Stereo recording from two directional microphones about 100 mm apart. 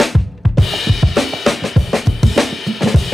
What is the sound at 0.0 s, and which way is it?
Drum kit, centre (ahead or behind).